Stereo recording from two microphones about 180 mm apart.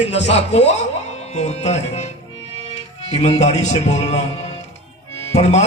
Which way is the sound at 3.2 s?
35° left (ahead or behind).